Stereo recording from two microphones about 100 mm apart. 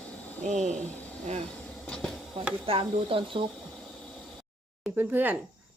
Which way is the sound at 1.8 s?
10° left (ahead or behind).